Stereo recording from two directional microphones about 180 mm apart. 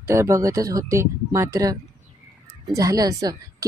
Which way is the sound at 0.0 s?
15° right (ahead or behind).